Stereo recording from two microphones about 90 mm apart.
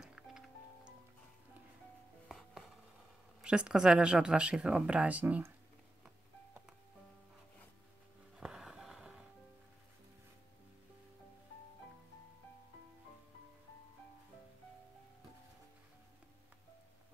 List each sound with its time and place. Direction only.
0.0 s music: 5° right (ahead or behind)
2.2 s music: centre (ahead or behind)
3.4 s speech: 10° right (ahead or behind)
8.4 s music: 5° right (ahead or behind)